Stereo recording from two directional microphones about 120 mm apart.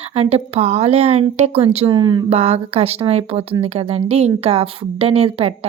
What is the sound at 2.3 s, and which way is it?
Speech, 60° right (ahead or behind).